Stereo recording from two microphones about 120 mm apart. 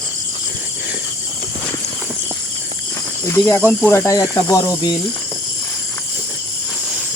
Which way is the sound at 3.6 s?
15° left (ahead or behind).